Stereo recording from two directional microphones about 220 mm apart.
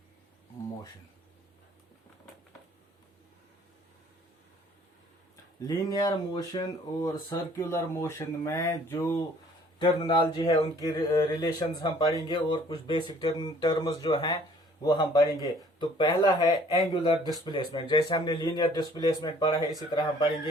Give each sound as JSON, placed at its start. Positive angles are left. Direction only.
{"t": 5.6, "sound": "speech", "side_deg": 15}